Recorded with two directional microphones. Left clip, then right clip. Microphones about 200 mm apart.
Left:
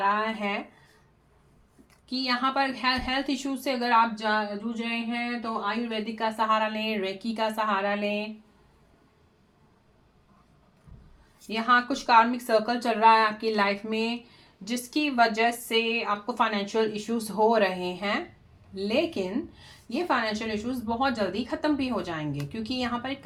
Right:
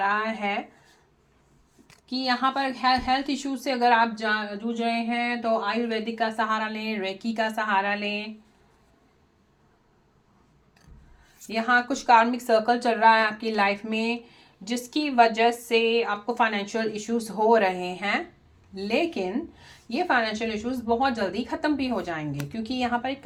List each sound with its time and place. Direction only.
0.0 s a woman's voice: 5° right (ahead or behind)
1.9 s a woman's voice: 30° right (ahead or behind)
11.4 s a woman's voice: 20° right (ahead or behind)